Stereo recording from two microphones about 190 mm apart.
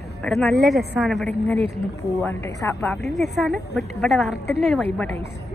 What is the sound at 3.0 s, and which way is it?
A woman's voice, centre (ahead or behind).